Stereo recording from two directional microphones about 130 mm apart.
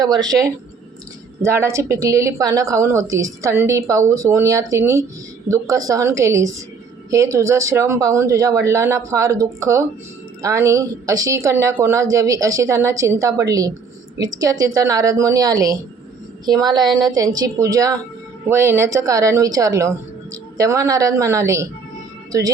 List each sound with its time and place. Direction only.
0.0 s a woman's voice: 30° right (ahead or behind)
22.3 s music: 25° right (ahead or behind)